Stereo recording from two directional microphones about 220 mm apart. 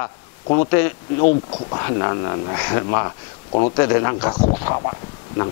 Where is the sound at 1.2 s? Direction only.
30° left (ahead or behind).